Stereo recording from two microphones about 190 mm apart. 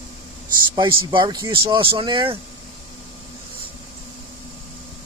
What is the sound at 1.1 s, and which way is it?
Speech, 25° right (ahead or behind).